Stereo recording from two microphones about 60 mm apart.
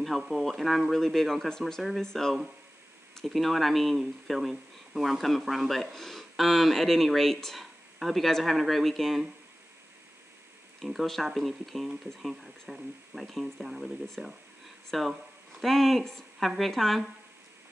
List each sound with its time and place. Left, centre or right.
0.0 s speech: centre
10.8 s speech: centre